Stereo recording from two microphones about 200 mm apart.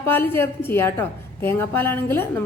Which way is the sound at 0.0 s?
10° left (ahead or behind).